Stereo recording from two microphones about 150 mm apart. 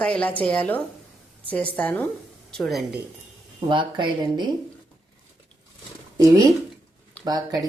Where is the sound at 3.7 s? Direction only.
30° right (ahead or behind).